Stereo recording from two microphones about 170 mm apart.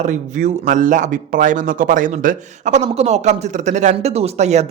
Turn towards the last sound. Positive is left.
turn(degrees=-40)  # may be behind; listen again after turning